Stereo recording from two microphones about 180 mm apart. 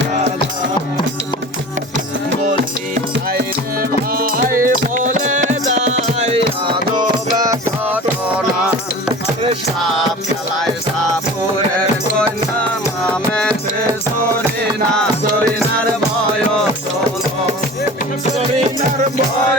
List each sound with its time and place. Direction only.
2.5 s music: 50° right (ahead or behind)
7.3 s music: 20° right (ahead or behind)